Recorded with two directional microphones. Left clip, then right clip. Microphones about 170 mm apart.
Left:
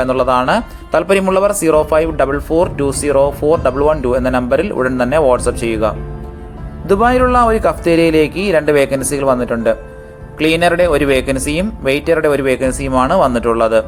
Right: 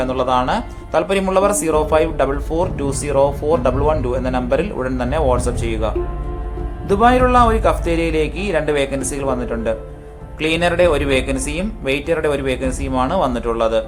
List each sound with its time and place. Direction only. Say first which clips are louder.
0.0 s speech: left 4 dB; 35° left (ahead or behind)